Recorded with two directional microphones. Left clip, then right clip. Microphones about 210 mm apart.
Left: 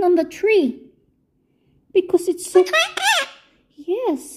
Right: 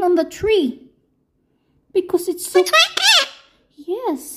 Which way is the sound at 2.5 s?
30° right (ahead or behind).